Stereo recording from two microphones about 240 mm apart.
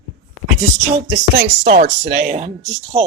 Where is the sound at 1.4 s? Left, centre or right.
Right.